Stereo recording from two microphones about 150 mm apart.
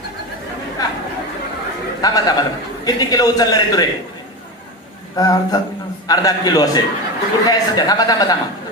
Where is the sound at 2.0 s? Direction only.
25° left (ahead or behind).